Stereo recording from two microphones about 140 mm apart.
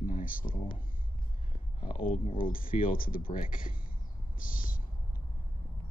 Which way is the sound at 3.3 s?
75° left (ahead or behind).